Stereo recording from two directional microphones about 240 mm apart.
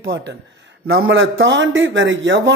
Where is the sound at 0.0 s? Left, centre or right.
Right.